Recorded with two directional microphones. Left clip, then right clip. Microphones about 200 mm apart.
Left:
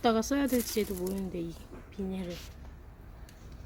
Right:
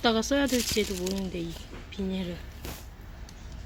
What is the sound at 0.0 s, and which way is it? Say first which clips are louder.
Speech: right 3 dB; 5° left (ahead or behind).